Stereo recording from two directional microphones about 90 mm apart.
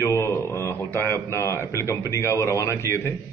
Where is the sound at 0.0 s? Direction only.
30° left (ahead or behind).